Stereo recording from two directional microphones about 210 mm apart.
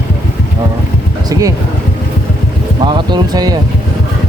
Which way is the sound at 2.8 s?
20° right (ahead or behind).